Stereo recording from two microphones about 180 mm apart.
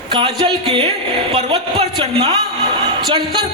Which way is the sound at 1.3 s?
30° right (ahead or behind).